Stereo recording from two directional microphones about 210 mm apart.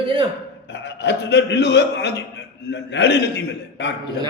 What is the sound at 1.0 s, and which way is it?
A man's voice, 55° left (ahead or behind).